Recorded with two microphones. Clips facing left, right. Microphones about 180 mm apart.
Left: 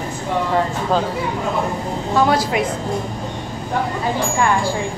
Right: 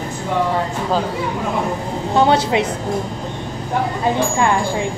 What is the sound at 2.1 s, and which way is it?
Speech, 25° right (ahead or behind).